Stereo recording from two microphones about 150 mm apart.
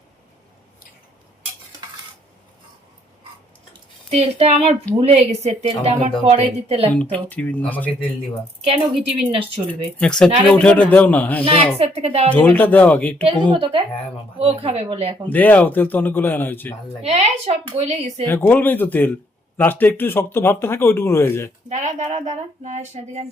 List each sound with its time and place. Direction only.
3.7 s a sound: 40° right (ahead or behind)
4.9 s speech: 40° right (ahead or behind)
6.9 s speech: 10° left (ahead or behind)
8.6 s speech: 40° right (ahead or behind)
10.0 s speech: 5° left (ahead or behind)
11.8 s speech: 40° right (ahead or behind)
12.3 s speech: 10° left (ahead or behind)
13.2 s speech: 35° right (ahead or behind)
15.3 s speech: 10° left (ahead or behind)
17.1 s speech: 45° right (ahead or behind)
18.3 s speech: 15° left (ahead or behind)
21.7 s speech: 50° right (ahead or behind)